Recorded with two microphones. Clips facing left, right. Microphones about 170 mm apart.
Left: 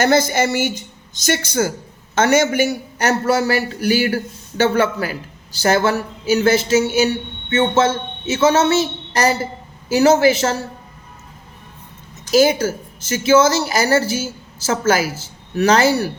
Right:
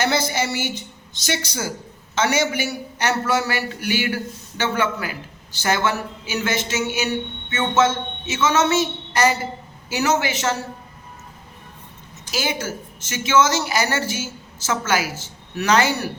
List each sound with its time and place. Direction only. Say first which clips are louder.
0.0 s speech: left 6 dB; 45° left (ahead or behind)
12.3 s speech: left 11 dB; 40° left (ahead or behind)